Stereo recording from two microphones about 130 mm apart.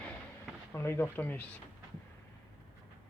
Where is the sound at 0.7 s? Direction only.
20° left (ahead or behind).